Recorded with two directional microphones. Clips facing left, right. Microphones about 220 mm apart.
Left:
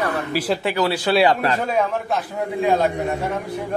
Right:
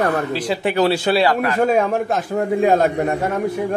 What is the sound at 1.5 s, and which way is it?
Speech, 50° right (ahead or behind).